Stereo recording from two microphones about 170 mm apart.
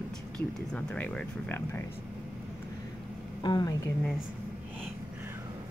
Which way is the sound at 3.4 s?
25° left (ahead or behind).